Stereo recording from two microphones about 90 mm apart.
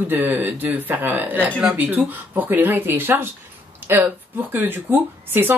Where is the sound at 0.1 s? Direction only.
25° right (ahead or behind).